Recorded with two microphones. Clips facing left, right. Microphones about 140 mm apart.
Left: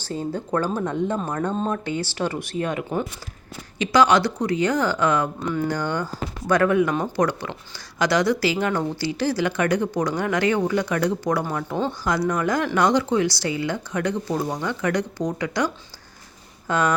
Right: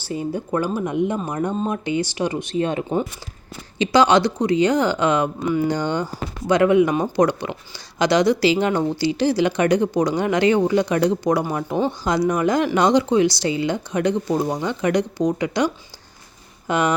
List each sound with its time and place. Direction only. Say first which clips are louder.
0.0 s speech: right 2 dB; 10° right (ahead or behind)
5.4 s speech: right 4 dB; 10° right (ahead or behind)
5.6 s speech: right 3 dB; 20° right (ahead or behind)